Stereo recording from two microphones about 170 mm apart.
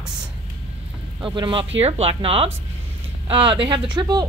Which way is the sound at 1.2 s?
30° right (ahead or behind).